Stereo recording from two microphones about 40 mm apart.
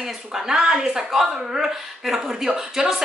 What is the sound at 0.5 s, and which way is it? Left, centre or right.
Speech, centre.